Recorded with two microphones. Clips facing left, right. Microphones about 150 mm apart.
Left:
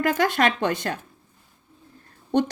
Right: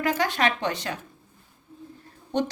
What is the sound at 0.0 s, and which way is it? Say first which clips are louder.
Speech: left 3 dB; 55° left (ahead or behind).